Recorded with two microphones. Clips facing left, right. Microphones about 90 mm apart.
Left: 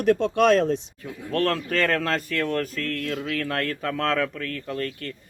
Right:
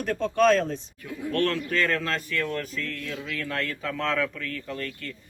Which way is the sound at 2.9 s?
70° left (ahead or behind).